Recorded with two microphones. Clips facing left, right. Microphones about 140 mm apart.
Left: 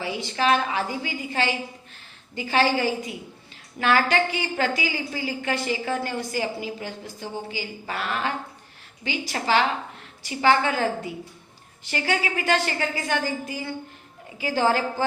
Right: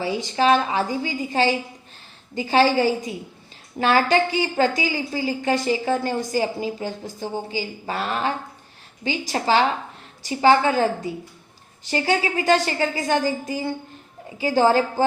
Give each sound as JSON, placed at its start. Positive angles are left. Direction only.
{"t": 0.0, "sound": "a woman's voice", "side_deg": -35}